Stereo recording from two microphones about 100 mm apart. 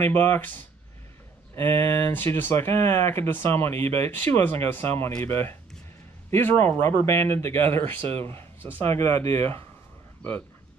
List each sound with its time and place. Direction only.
0.0 s speech: 20° left (ahead or behind)
8.4 s a sound: 15° left (ahead or behind)
8.9 s speech: 30° left (ahead or behind)